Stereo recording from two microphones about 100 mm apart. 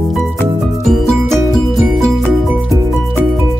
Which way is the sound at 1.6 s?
Centre (ahead or behind).